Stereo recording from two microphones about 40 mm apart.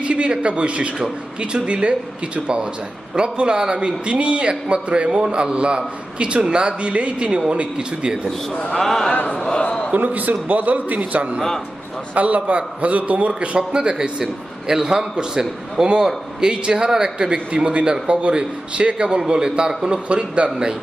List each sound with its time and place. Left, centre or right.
0.0 s a man's voice: right
8.8 s speech: centre
9.9 s a man's voice: right; by 17.4 s centre
17.5 s a man's voice: right
17.8 s a man's voice: centre
18.1 s a man's voice: right